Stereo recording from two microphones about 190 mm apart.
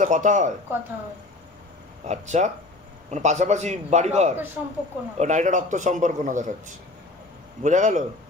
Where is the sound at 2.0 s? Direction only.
35° right (ahead or behind).